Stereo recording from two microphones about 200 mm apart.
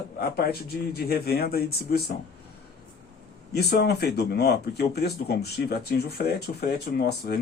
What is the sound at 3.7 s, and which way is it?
A man's voice, 55° left (ahead or behind).